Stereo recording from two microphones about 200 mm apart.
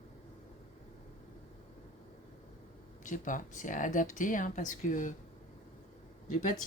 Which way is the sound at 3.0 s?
40° left (ahead or behind).